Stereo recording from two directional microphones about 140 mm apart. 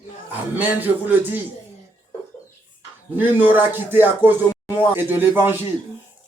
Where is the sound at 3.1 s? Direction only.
15° right (ahead or behind).